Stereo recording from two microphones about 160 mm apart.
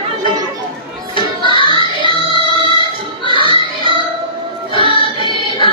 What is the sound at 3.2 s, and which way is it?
Music, 30° left (ahead or behind).